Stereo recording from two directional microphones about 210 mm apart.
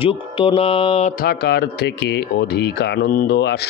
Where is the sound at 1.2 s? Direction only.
50° left (ahead or behind).